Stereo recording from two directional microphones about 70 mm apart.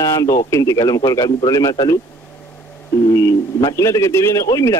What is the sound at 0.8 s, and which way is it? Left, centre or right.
Speech, left.